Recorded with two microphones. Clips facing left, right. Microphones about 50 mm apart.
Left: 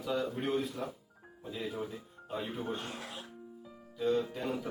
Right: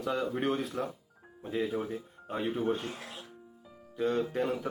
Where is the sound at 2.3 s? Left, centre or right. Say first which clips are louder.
Right 6 dB; right.